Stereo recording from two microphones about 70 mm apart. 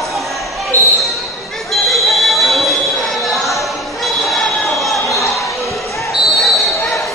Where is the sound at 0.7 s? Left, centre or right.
Right.